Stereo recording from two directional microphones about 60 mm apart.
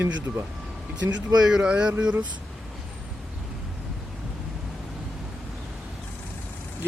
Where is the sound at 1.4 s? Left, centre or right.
Centre.